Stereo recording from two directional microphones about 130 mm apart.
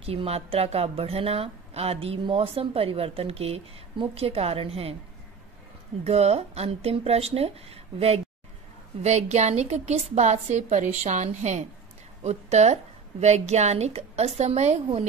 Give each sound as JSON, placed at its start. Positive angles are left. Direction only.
{"t": 0.0, "sound": "a woman's voice", "side_deg": -50}
{"t": 6.0, "sound": "a woman's voice", "side_deg": -55}